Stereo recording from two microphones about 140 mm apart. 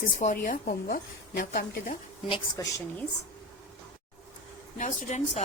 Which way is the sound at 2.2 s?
35° left (ahead or behind).